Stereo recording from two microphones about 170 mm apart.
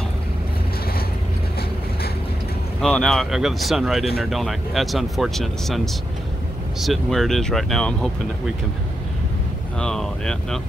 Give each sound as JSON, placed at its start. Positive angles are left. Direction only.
{"t": 2.8, "sound": "speech", "side_deg": 5}
{"t": 6.8, "sound": "speech", "side_deg": 0}
{"t": 9.8, "sound": "speech", "side_deg": 5}